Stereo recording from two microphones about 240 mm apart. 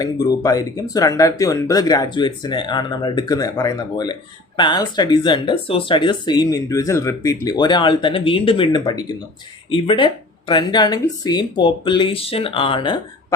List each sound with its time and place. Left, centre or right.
0.0 s speech: centre